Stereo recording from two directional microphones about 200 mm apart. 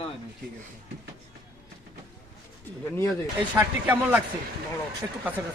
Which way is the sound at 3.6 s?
10° right (ahead or behind).